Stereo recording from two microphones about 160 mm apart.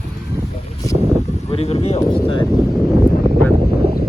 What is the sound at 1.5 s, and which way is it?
Speech, 40° left (ahead or behind).